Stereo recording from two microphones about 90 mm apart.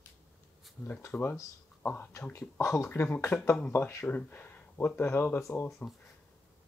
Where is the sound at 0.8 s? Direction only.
25° left (ahead or behind).